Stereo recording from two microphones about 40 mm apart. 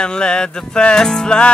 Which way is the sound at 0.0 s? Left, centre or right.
Left.